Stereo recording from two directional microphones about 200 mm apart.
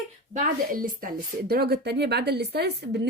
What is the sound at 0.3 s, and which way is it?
Speech, 45° right (ahead or behind).